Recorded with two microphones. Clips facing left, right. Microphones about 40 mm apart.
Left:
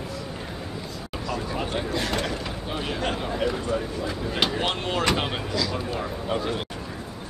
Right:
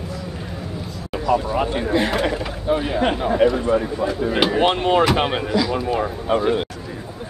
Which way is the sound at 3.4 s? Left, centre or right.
Right.